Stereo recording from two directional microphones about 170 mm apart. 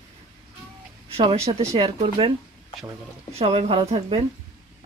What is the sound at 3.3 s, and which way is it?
Speech, 35° right (ahead or behind).